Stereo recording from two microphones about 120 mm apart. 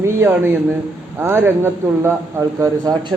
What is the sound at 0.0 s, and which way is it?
Speech, 20° right (ahead or behind).